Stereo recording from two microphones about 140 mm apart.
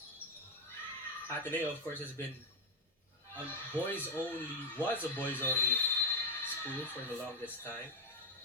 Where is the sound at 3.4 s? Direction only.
15° left (ahead or behind).